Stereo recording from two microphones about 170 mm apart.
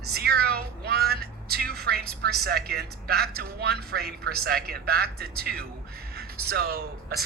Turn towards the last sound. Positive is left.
turn(degrees=-65)  # may be behind; listen again after turning